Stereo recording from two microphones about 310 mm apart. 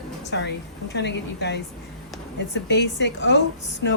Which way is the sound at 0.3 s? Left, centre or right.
Left.